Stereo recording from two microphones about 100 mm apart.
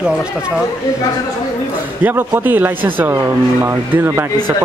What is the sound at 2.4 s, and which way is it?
A man's voice, 20° right (ahead or behind).